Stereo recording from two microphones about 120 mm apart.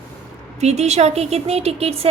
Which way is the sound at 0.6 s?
65° right (ahead or behind).